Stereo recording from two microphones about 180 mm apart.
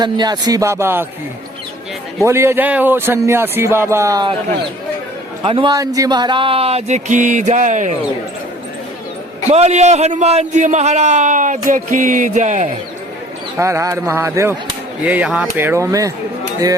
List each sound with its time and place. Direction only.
0.0 s speech: 20° right (ahead or behind)
2.2 s speech: 15° right (ahead or behind)
5.4 s speech: 30° right (ahead or behind); by 7.9 s 45° right (ahead or behind)
9.5 s speech: 35° right (ahead or behind)
11.7 s music: 45° right (ahead or behind)
13.6 s speech: 15° right (ahead or behind)